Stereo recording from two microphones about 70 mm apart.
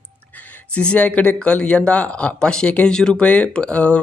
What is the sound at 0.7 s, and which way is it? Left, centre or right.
Speech, centre.